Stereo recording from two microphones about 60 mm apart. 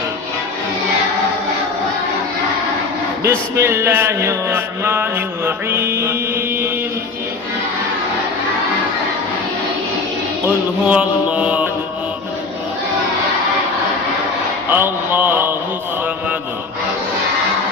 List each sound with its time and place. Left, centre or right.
3.2 s a sound: right
10.8 s mantra: right
14.7 s speech: right